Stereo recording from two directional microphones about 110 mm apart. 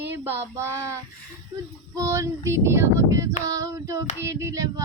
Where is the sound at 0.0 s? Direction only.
20° right (ahead or behind).